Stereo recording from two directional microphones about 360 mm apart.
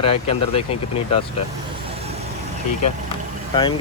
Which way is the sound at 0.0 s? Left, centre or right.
Centre.